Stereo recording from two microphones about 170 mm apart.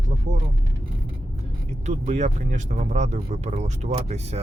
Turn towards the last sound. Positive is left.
turn(degrees=-40)  # may be behind; listen again after turning